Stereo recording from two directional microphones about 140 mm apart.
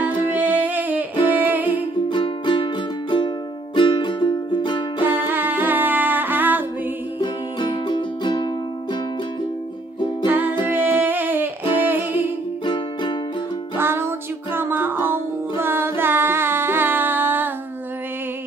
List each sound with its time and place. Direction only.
0.0 s music: 10° right (ahead or behind)
2.0 s music: 35° left (ahead or behind)
5.0 s music: 15° right (ahead or behind)
7.2 s music: 30° left (ahead or behind)
10.2 s music: 15° right (ahead or behind)
12.6 s music: 35° left (ahead or behind)
13.7 s music: 15° right (ahead or behind)